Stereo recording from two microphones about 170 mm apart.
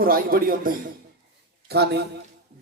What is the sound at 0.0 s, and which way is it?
Speech, 60° right (ahead or behind).